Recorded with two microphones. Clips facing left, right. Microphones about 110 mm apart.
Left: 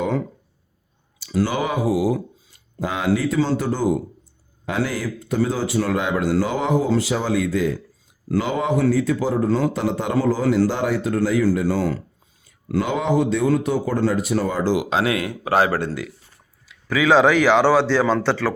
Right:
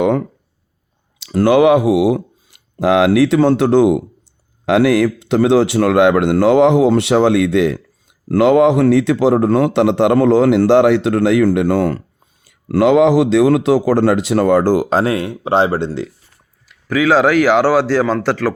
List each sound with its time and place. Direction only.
0.0 s a man's voice: 60° right (ahead or behind)
12.5 s a man's voice: 70° right (ahead or behind)
14.7 s speech: 40° right (ahead or behind); by 15.9 s 25° right (ahead or behind)
16.9 s speech: 5° right (ahead or behind)